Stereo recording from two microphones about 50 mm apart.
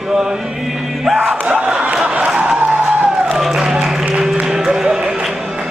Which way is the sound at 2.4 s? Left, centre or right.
Centre.